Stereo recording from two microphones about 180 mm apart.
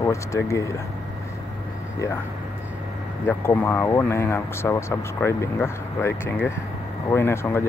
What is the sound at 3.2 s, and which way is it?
Speech, 10° left (ahead or behind).